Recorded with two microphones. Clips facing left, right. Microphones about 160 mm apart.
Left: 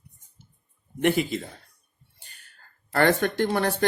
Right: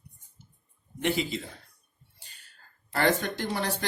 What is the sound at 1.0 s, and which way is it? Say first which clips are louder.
Speech: left 5 dB; 55° left (ahead or behind).